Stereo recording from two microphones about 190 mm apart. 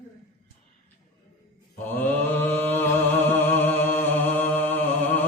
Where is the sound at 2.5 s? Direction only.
10° left (ahead or behind).